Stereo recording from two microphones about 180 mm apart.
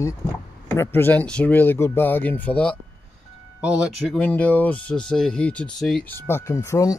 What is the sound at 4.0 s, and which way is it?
Speech, 5° left (ahead or behind).